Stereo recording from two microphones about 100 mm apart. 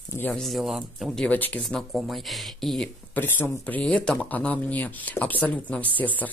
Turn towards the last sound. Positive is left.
turn(degrees=15)  # may be behind; listen again after turning